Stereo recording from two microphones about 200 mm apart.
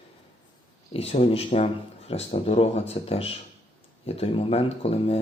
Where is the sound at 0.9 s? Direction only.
30° left (ahead or behind).